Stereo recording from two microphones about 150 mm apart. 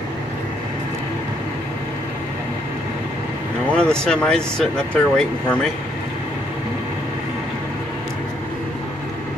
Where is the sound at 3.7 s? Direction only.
5° left (ahead or behind).